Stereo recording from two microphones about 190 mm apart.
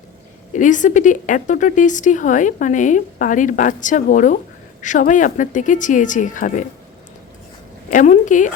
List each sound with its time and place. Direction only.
0.5 s speech: 40° left (ahead or behind)
7.9 s a woman's voice: 40° left (ahead or behind)